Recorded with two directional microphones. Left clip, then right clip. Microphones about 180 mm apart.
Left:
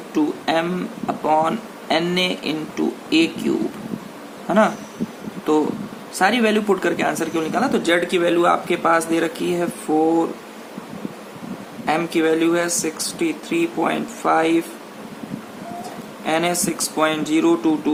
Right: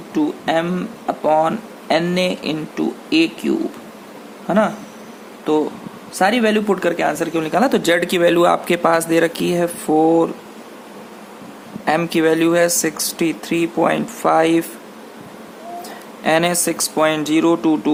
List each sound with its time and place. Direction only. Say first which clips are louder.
0.1 s speech: right 2 dB; 30° right (ahead or behind); by 9.6 s 55° right (ahead or behind)
9.9 s speech: right 3 dB; 45° right (ahead or behind)
11.9 s speech: right 3 dB; 50° right (ahead or behind)
16.2 s speech: right 4 dB; 60° right (ahead or behind)